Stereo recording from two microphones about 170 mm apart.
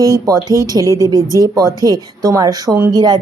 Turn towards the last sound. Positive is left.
turn(degrees=-25)  # may be behind; listen again after turning